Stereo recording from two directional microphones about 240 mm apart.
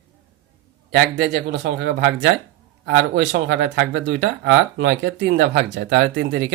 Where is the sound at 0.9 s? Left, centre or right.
Right.